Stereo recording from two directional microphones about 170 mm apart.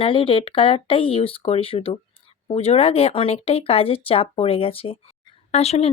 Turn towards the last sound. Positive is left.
turn(degrees=40)  # may be behind; listen again after turning